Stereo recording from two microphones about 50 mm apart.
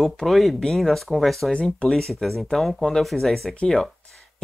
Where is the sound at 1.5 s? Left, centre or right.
Left.